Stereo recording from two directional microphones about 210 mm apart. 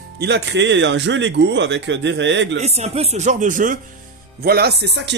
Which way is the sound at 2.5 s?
30° right (ahead or behind).